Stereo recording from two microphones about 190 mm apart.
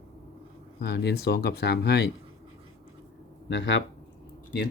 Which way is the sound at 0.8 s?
60° left (ahead or behind).